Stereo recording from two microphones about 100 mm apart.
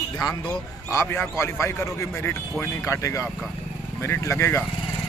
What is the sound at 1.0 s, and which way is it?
Speech, 15° left (ahead or behind).